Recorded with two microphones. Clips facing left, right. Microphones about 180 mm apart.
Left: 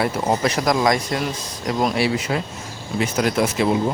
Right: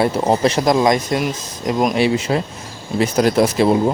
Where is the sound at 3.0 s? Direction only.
35° right (ahead or behind).